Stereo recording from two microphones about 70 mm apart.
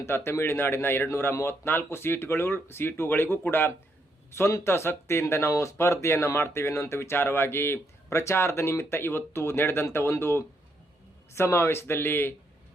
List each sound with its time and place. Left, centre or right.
0.0 s speech: left
4.3 s speech: left